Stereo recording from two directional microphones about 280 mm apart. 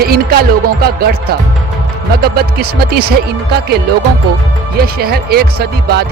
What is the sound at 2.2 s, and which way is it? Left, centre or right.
Speech, right.